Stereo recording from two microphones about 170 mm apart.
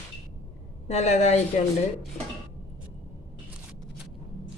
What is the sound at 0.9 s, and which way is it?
Speech, 40° left (ahead or behind).